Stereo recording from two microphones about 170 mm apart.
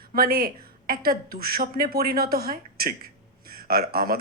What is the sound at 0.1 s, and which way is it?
Speech, 60° right (ahead or behind).